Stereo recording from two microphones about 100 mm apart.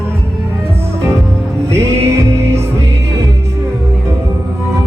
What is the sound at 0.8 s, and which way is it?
Music, 25° right (ahead or behind).